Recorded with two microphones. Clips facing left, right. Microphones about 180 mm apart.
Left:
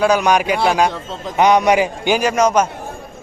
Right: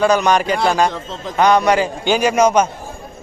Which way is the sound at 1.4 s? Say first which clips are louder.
Left 1 dB; 20° left (ahead or behind).